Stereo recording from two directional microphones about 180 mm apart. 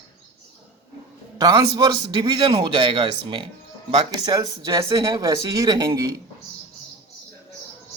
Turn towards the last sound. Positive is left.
turn(degrees=-20)  # may be behind; listen again after turning